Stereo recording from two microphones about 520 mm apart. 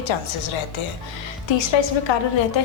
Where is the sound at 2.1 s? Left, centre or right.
Left.